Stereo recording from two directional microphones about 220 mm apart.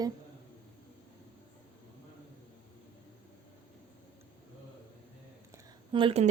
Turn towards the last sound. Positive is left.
turn(degrees=-25)  # may be behind; listen again after turning